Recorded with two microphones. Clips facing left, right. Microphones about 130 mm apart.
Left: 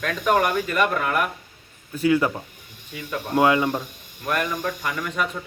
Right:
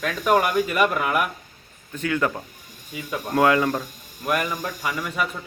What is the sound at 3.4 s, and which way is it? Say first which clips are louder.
Speech: even; 20° left (ahead or behind).